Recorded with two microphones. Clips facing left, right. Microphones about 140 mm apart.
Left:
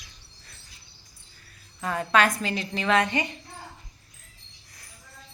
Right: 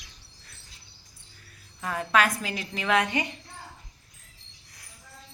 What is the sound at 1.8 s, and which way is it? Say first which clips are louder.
A woman's voice: left 2 dB; 5° right (ahead or behind).